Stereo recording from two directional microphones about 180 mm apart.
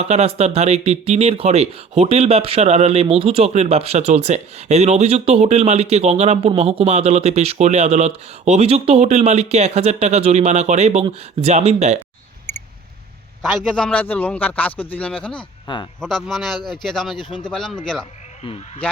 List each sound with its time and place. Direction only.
0.0 s speech: 35° right (ahead or behind)
12.5 s mouse: 10° left (ahead or behind)
13.4 s a man's voice: 5° left (ahead or behind)
15.6 s speech: 25° left (ahead or behind)
16.0 s speech: centre (ahead or behind)
17.2 s speech: 25° left (ahead or behind)
17.5 s speech: 5° left (ahead or behind)